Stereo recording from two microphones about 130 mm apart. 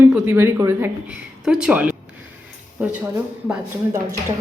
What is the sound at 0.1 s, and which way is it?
Speech, 10° right (ahead or behind).